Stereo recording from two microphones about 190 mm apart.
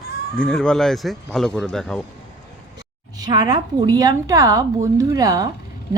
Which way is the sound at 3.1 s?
20° right (ahead or behind).